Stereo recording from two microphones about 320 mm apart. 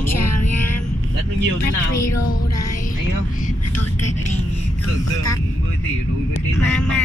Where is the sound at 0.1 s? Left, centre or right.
Left.